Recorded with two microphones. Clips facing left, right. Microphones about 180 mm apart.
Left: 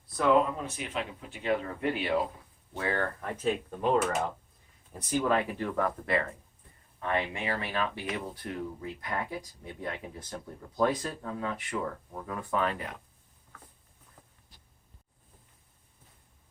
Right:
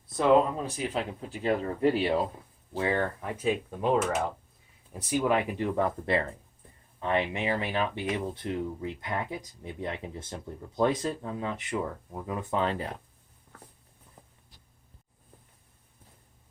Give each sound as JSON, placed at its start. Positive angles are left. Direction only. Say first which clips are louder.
{"t": 0.5, "sound": "speech", "louder": "right 4 dB", "side_deg": -35}
{"t": 2.7, "sound": "speech", "louder": "right 3 dB", "side_deg": -20}